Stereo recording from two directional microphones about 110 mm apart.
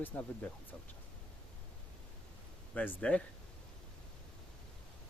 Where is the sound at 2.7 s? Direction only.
10° left (ahead or behind).